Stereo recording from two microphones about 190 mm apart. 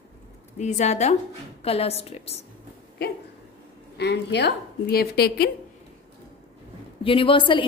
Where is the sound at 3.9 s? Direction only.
65° left (ahead or behind).